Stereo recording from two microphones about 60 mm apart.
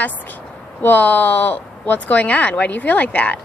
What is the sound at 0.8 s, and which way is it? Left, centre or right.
A woman's voice, left.